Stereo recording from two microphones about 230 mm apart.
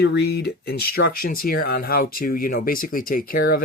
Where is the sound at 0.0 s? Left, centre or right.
Left.